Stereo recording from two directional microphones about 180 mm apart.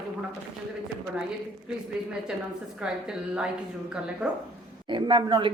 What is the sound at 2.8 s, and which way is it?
Speech, 5° right (ahead or behind).